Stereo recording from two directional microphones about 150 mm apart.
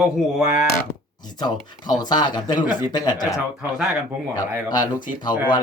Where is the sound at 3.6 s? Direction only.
5° right (ahead or behind).